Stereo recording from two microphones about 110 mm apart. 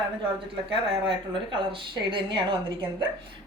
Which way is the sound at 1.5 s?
50° right (ahead or behind).